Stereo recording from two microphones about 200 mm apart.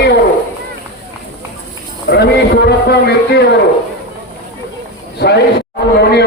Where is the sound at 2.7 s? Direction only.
55° left (ahead or behind).